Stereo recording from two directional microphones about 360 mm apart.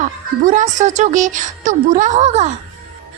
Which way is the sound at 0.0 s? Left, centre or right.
Right.